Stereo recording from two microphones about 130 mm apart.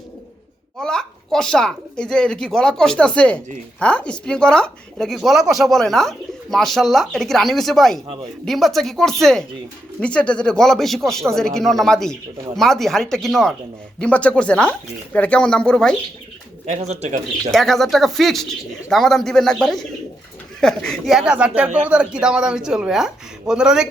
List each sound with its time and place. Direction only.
0.8 s speech: 5° left (ahead or behind)
16.6 s speech: 60° right (ahead or behind)
17.5 s speech: centre (ahead or behind)